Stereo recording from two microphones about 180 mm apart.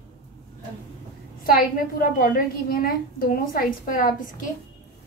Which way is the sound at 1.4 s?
50° left (ahead or behind).